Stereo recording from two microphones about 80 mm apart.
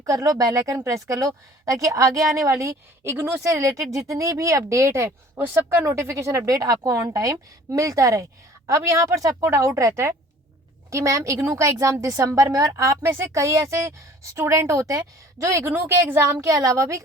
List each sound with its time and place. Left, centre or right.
0.0 s a woman's voice: right
3.4 s a woman's voice: right
15.6 s a woman's voice: right
16.5 s a woman's voice: right